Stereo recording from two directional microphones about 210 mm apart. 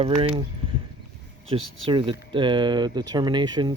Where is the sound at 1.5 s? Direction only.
25° right (ahead or behind).